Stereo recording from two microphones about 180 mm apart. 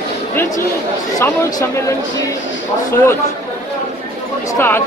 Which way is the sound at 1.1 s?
15° left (ahead or behind).